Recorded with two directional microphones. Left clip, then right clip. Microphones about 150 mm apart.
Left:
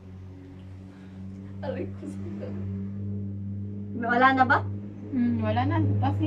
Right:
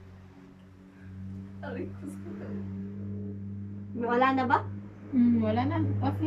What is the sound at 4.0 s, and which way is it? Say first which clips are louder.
Speech: left 5 dB; 15° right (ahead or behind).